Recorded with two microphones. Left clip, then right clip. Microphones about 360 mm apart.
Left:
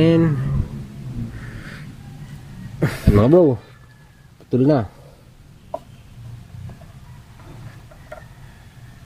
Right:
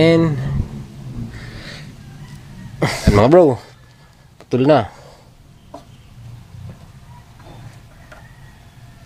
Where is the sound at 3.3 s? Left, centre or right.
Right.